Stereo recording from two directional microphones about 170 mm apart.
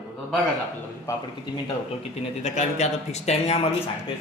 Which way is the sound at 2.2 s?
40° left (ahead or behind).